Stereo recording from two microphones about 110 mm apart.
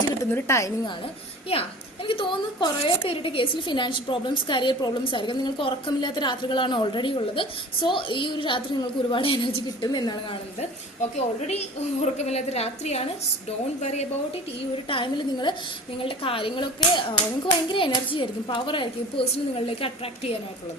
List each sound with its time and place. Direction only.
0.2 s speech: 25° left (ahead or behind)
1.5 s a woman's voice: 60° left (ahead or behind)
2.0 s a woman's voice: 50° left (ahead or behind)
9.8 s a woman's voice: 40° left (ahead or behind)
10.6 s a woman's voice: 75° left (ahead or behind)
13.8 s a woman's voice: 90° left
14.8 s a woman's voice: 50° left (ahead or behind)